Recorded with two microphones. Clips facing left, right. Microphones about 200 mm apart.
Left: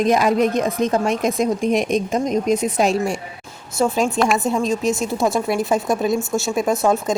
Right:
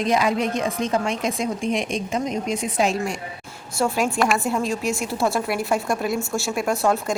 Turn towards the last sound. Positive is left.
turn(degrees=20)  # may be behind; listen again after turning